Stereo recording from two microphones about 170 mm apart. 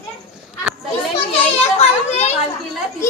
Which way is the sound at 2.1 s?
40° left (ahead or behind).